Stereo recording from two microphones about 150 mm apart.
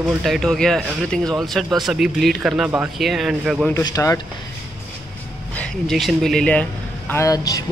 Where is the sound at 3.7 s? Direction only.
25° left (ahead or behind).